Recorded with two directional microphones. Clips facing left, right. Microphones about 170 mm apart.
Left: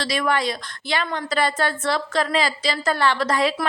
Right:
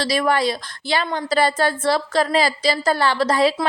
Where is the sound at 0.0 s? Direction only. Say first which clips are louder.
Right 3 dB; 35° right (ahead or behind).